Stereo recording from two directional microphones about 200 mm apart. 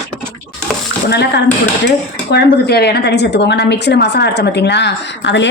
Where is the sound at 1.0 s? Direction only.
55° left (ahead or behind).